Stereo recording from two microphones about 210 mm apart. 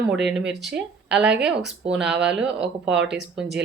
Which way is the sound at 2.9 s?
55° right (ahead or behind).